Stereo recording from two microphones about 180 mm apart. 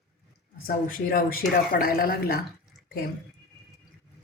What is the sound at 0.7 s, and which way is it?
Speech, 55° left (ahead or behind).